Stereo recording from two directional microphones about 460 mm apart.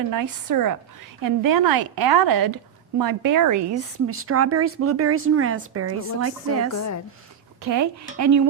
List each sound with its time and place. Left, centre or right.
0.1 s a woman's voice: right